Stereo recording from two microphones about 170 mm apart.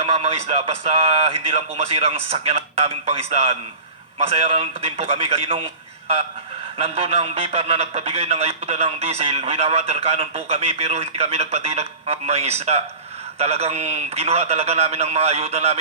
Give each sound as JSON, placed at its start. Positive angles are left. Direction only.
{"t": 0.0, "sound": "a man's voice", "side_deg": -40}
{"t": 6.7, "sound": "a man's voice", "side_deg": -35}